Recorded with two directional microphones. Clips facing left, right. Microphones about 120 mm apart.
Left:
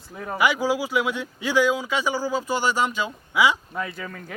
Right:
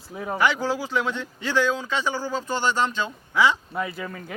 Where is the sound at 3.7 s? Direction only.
5° right (ahead or behind).